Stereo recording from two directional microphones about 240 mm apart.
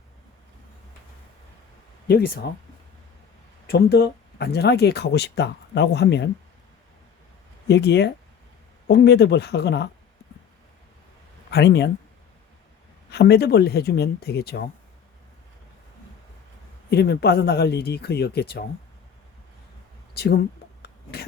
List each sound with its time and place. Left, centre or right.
2.0 s speech: left
3.7 s speech: left
7.7 s speech: left
11.5 s speech: left
13.1 s speech: left
16.9 s speech: left
20.1 s speech: left
20.8 s a sound: left